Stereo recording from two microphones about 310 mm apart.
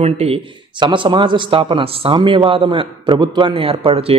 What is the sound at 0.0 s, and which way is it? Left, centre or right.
A man's voice, centre.